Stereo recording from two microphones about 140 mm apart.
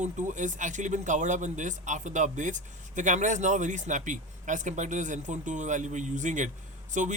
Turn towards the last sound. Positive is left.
turn(degrees=-60)  # may be behind; listen again after turning